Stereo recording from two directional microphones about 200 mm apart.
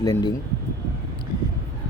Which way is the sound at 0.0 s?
20° left (ahead or behind).